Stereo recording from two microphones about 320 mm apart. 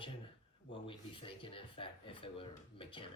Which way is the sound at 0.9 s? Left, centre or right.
Centre.